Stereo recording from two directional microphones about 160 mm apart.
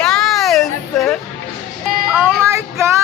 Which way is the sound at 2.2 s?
15° right (ahead or behind).